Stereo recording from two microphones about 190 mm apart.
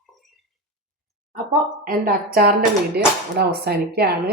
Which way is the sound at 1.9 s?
50° right (ahead or behind).